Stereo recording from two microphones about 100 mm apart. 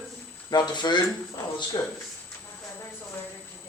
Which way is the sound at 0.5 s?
45° left (ahead or behind).